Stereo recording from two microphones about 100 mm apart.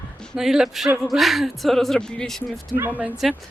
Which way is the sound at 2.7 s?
20° left (ahead or behind).